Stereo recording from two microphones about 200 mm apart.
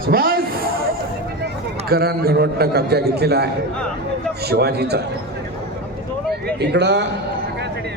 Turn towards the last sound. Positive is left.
turn(degrees=-60)  # may be behind; listen again after turning